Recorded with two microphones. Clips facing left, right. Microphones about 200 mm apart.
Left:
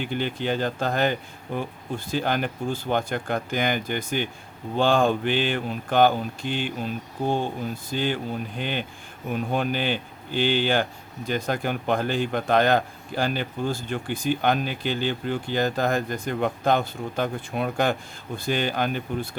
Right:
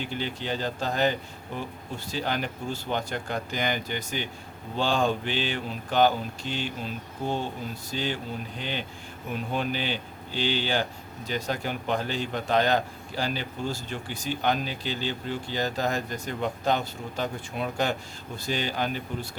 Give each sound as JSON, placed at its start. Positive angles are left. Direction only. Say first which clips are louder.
{"t": 0.2, "sound": "a man's voice", "louder": "left 6 dB", "side_deg": 55}
{"t": 7.9, "sound": "a man's voice", "louder": "left 4 dB", "side_deg": 55}